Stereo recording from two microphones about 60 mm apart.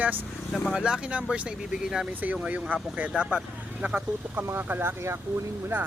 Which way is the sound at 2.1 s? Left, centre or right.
Right.